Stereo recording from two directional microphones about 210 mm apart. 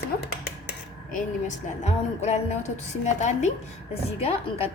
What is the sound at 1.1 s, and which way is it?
A woman's voice, 35° left (ahead or behind).